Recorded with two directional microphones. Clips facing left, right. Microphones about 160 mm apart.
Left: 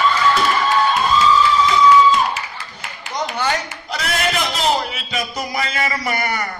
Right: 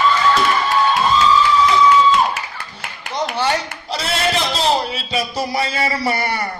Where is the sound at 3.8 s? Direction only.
30° right (ahead or behind).